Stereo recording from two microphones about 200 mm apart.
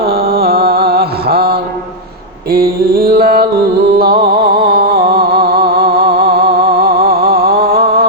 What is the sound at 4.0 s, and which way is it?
Music, 50° right (ahead or behind).